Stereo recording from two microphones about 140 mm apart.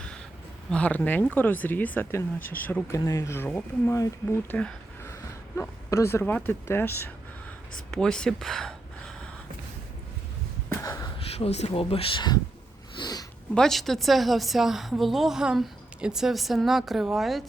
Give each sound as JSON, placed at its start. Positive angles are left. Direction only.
{"t": 0.7, "sound": "speech", "side_deg": 10}
{"t": 5.5, "sound": "speech", "side_deg": 20}
{"t": 7.9, "sound": "speech", "side_deg": 5}
{"t": 10.8, "sound": "a sound", "side_deg": 25}
{"t": 11.2, "sound": "speech", "side_deg": 45}
{"t": 13.0, "sound": "sniff", "side_deg": 30}
{"t": 13.5, "sound": "a woman's voice", "side_deg": 5}